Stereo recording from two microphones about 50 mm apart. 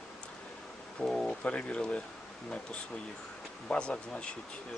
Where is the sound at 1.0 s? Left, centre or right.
Centre.